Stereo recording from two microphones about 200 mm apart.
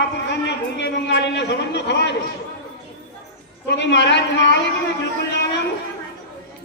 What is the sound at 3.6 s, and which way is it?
Speech, 60° left (ahead or behind).